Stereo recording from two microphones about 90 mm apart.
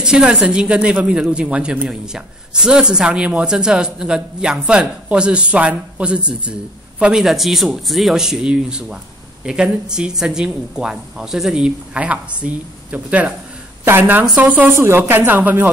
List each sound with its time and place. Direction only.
0.0 s a woman's voice: 10° right (ahead or behind)